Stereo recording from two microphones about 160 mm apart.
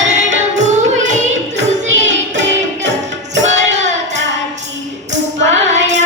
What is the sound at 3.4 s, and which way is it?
Music, 45° right (ahead or behind).